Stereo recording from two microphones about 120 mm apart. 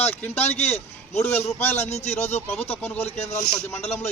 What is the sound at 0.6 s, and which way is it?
A man's voice, 65° left (ahead or behind).